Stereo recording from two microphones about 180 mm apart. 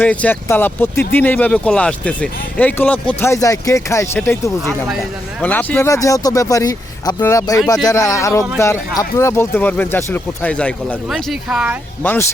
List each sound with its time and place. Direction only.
0.0 s speech: 10° left (ahead or behind)
12.0 s speech: 10° left (ahead or behind)